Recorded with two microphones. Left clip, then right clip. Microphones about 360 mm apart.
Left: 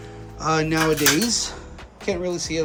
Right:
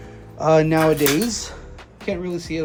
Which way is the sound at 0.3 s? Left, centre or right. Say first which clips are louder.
Right 5 dB; centre.